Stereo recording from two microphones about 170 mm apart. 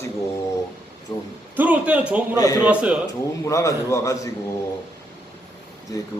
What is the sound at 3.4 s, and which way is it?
Speech, 20° left (ahead or behind).